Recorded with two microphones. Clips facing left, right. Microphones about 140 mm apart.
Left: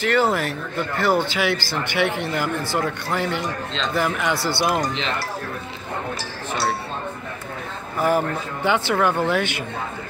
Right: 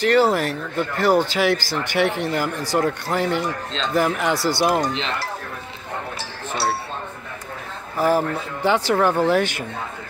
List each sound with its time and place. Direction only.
0.0 s speech: 40° right (ahead or behind)
8.6 s speech: 35° right (ahead or behind)